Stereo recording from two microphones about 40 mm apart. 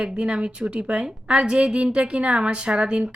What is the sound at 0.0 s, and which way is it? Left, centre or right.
A woman's voice, right.